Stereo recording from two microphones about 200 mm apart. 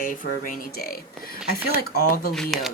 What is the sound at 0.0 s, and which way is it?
Speech, 40° left (ahead or behind).